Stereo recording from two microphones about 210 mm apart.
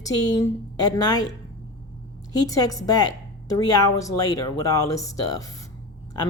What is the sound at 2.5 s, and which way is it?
A woman's voice, 15° left (ahead or behind).